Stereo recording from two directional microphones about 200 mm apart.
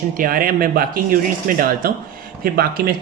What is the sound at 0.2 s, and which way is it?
Speech, 45° right (ahead or behind).